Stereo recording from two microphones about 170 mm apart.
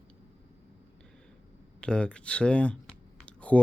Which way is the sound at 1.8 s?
5° left (ahead or behind).